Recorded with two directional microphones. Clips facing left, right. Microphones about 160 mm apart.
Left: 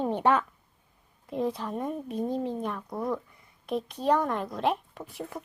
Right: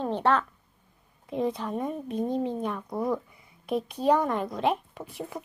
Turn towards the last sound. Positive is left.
turn(degrees=0)  # may be behind; listen again after turning